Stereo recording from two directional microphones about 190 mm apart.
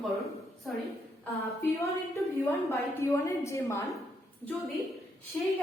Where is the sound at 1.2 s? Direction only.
15° left (ahead or behind).